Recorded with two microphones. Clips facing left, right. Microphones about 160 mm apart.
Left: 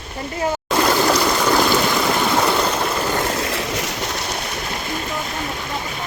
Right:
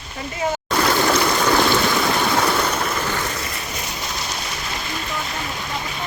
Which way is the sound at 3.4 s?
90° left.